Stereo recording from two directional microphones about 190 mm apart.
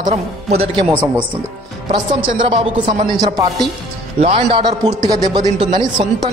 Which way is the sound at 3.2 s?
20° right (ahead or behind).